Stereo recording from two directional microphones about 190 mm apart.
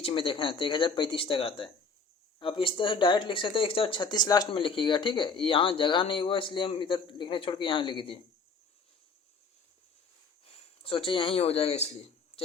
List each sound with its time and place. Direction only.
0.0 s speech: 30° left (ahead or behind)
10.4 s speech: 30° left (ahead or behind)